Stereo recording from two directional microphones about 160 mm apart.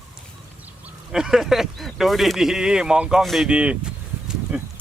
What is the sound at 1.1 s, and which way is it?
Speech, 5° right (ahead or behind).